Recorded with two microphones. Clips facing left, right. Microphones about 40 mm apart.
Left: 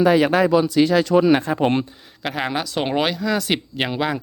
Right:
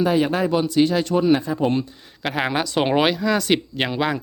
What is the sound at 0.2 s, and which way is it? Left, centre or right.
Speech, left.